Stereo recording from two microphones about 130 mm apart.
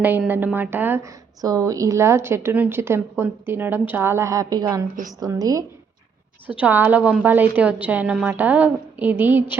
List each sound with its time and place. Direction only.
0.3 s a woman's voice: 15° right (ahead or behind)
6.5 s a woman's voice: 10° right (ahead or behind)